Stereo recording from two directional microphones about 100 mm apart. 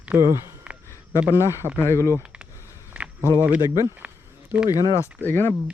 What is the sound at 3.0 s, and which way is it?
Walk, 10° right (ahead or behind).